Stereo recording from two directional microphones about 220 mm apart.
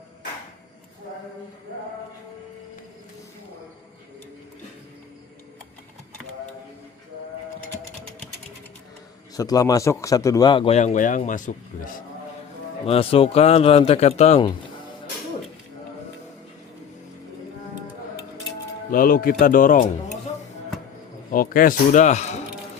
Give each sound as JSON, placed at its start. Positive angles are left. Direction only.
{"t": 9.3, "sound": "a man's voice", "side_deg": 15}
{"t": 12.8, "sound": "a man's voice", "side_deg": 25}
{"t": 18.9, "sound": "speech", "side_deg": 40}
{"t": 21.3, "sound": "speech", "side_deg": 40}